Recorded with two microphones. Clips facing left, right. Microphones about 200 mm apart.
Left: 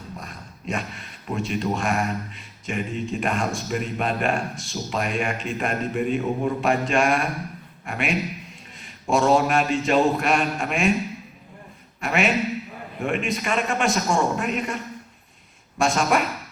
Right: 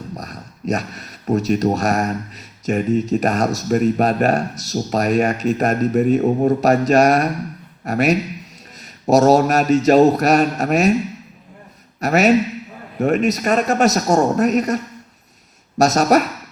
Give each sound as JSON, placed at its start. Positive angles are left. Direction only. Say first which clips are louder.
{"t": 0.2, "sound": "speech", "louder": "right 7 dB", "side_deg": -40}
{"t": 11.9, "sound": "speech", "louder": "right 8 dB", "side_deg": -40}
{"t": 15.8, "sound": "speech", "louder": "right 7 dB", "side_deg": -40}